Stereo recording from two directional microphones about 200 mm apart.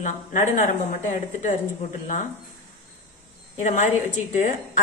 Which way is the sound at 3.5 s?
35° left (ahead or behind).